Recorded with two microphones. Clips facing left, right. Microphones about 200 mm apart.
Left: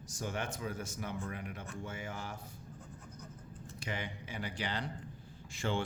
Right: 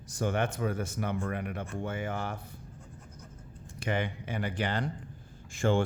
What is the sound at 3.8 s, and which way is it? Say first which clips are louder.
Speech: right 9 dB; 55° right (ahead or behind).